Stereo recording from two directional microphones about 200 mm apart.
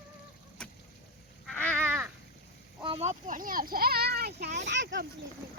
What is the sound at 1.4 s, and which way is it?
Crow, 5° left (ahead or behind).